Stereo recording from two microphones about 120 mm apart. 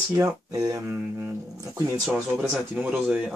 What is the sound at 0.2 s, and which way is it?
Speech, 30° right (ahead or behind).